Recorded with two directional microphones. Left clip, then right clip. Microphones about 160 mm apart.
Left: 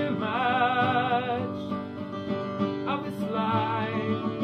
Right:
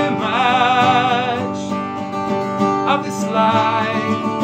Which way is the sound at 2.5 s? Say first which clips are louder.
Right 16 dB; 30° right (ahead or behind).